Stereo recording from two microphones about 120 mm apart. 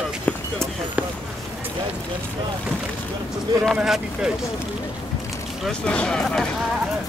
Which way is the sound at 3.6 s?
5° right (ahead or behind).